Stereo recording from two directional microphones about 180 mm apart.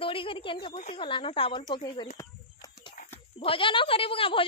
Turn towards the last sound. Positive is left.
turn(degrees=30)  # may be behind; listen again after turning